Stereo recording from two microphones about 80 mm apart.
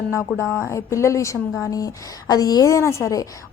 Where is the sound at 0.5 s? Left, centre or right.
Left.